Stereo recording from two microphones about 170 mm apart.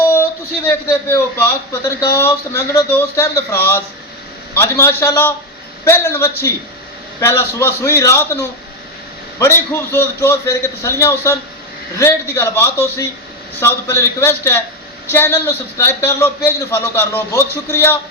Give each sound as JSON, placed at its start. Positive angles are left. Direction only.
{"t": 0.1, "sound": "a man's voice", "side_deg": 15}